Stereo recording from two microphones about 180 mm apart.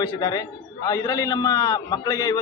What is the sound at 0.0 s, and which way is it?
A man's voice, 20° left (ahead or behind).